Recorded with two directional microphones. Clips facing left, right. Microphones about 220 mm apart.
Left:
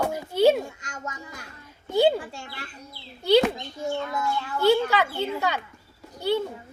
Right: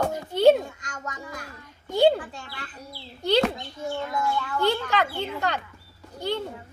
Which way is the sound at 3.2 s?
10° left (ahead or behind).